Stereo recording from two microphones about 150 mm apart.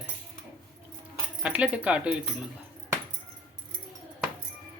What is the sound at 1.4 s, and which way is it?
Speech, 5° right (ahead or behind).